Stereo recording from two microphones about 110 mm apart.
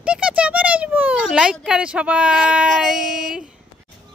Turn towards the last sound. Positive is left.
turn(degrees=-5)  # may be behind; listen again after turning